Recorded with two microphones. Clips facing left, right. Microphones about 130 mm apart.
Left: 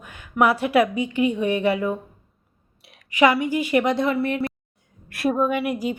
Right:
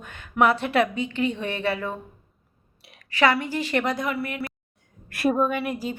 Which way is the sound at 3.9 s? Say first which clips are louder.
Left 6 dB; 25° left (ahead or behind).